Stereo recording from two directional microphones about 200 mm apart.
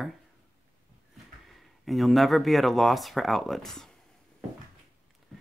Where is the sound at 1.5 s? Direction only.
Centre (ahead or behind).